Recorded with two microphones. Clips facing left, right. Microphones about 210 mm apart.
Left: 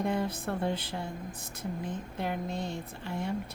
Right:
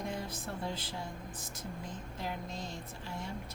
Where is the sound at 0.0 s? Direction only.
60° left (ahead or behind).